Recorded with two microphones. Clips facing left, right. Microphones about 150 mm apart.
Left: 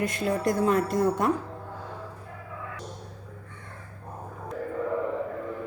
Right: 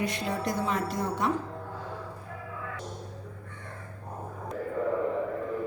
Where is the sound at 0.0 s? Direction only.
50° left (ahead or behind).